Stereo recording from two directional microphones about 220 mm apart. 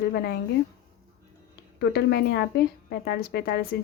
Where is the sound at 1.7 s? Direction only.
45° left (ahead or behind).